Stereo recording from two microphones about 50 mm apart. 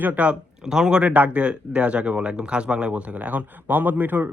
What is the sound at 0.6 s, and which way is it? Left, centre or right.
Speech, centre.